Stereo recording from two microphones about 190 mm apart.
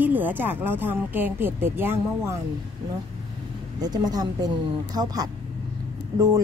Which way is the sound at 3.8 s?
20° right (ahead or behind).